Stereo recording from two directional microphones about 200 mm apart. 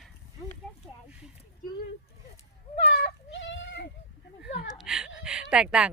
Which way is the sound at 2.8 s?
60° left (ahead or behind).